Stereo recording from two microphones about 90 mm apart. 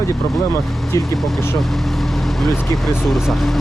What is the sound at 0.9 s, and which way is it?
Speech, 35° left (ahead or behind).